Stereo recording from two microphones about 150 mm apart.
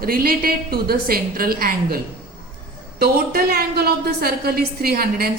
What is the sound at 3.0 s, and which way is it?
A woman's voice, 85° right.